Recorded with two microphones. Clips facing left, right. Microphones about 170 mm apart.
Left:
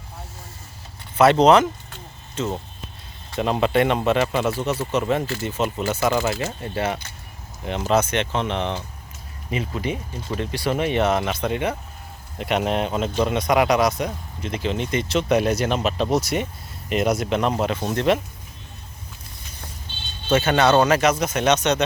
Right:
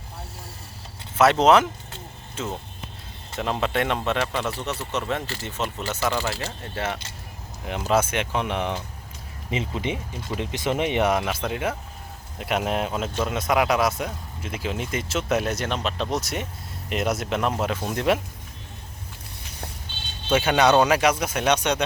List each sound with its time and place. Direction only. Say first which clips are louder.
1.1 s a man's voice: left 3 dB; centre (ahead or behind)
9.5 s speech: left 1 dB; 20° right (ahead or behind)
11.2 s a man's voice: left 3 dB; 5° right (ahead or behind)
20.3 s speech: left 1 dB; 10° right (ahead or behind)